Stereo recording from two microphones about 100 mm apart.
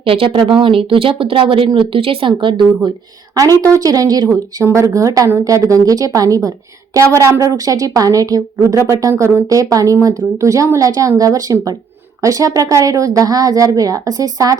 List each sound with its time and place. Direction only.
0.0 s speech: 65° right (ahead or behind)
3.6 s speech: 35° right (ahead or behind)